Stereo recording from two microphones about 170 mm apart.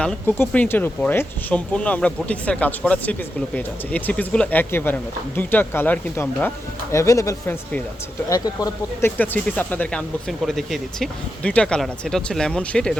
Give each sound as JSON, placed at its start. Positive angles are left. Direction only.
{"t": 0.0, "sound": "speech", "side_deg": 10}